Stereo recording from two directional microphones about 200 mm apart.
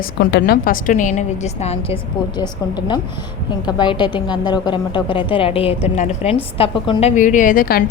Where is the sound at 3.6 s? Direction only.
20° left (ahead or behind).